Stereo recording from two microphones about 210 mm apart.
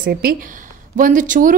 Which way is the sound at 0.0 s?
45° right (ahead or behind).